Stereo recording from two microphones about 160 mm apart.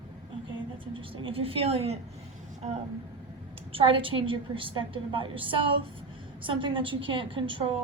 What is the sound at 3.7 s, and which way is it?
A woman's voice, 35° right (ahead or behind).